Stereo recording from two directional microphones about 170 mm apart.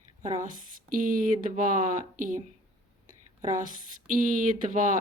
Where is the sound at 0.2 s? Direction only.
50° right (ahead or behind).